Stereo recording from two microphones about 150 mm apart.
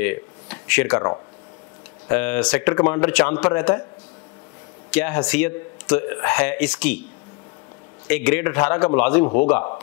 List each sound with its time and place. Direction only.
0.0 s a sound: 10° left (ahead or behind)
0.9 s speech: 20° left (ahead or behind)
4.9 s speech: 10° left (ahead or behind)
8.1 s speech: 10° left (ahead or behind)